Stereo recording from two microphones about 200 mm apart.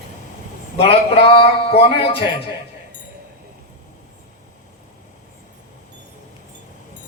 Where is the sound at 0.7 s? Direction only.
30° left (ahead or behind).